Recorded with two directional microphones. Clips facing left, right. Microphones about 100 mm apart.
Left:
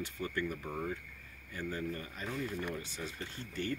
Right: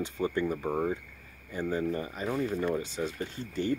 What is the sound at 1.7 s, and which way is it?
Speech, 20° right (ahead or behind).